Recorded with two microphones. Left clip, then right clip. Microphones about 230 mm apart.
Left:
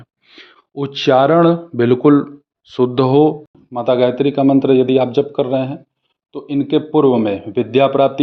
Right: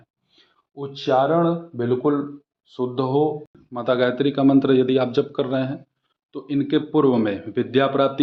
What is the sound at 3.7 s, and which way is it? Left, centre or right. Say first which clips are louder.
A man's voice: left 6 dB; left.